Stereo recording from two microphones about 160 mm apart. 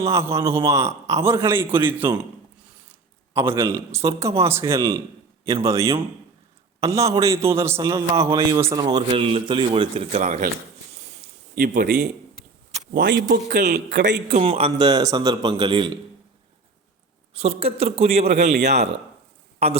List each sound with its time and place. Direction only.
0.0 s a man's voice: 15° right (ahead or behind)
3.3 s a man's voice: 15° right (ahead or behind)
9.0 s a man's voice: 35° right (ahead or behind)
11.5 s a man's voice: 65° right (ahead or behind)
12.9 s a man's voice: 90° right
14.4 s a man's voice: 35° right (ahead or behind)
17.3 s a man's voice: 40° right (ahead or behind)
19.5 s speech: 40° right (ahead or behind)